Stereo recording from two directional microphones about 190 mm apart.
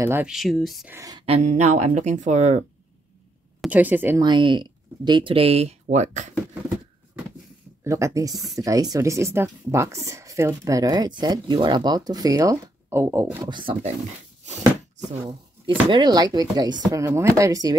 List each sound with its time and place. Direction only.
0.0 s speech: 10° right (ahead or behind)
0.9 s speech: 20° right (ahead or behind)
1.2 s speech: 35° right (ahead or behind)
3.6 s speech: 10° right (ahead or behind)
4.2 s speech: 25° right (ahead or behind)
7.8 s speech: 15° right (ahead or behind)
15.2 s speech: 25° right (ahead or behind)